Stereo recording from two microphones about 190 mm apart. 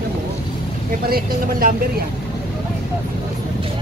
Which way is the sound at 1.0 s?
50° right (ahead or behind).